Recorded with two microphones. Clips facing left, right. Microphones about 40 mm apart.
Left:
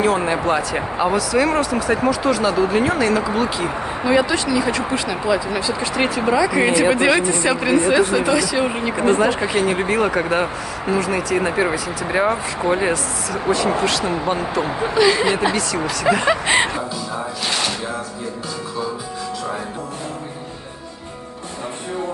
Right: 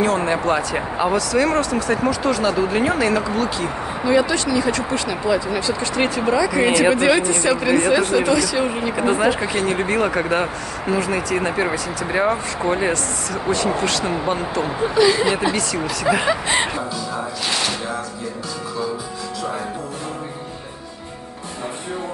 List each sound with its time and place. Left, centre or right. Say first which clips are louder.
0.0 s speech: left 1 dB; centre
3.3 s speech: left 1 dB; centre
8.9 s speech: left 2 dB; centre
15.0 s speech: even; left
15.5 s speech: left 1 dB; centre
16.3 s speech: left 3 dB; left